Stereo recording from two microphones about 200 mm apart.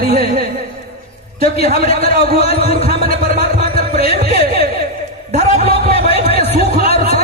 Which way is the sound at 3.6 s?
30° left (ahead or behind).